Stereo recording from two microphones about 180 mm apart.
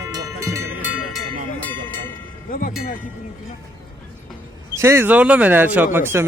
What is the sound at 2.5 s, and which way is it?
Music, 50° left (ahead or behind).